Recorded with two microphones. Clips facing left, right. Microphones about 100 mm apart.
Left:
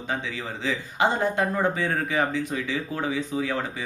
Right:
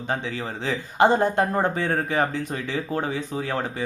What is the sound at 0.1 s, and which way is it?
Speech, 45° right (ahead or behind).